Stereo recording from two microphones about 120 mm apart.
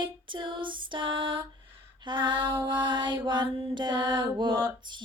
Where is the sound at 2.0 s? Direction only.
40° right (ahead or behind).